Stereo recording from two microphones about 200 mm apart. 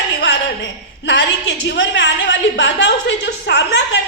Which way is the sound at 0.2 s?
60° left (ahead or behind).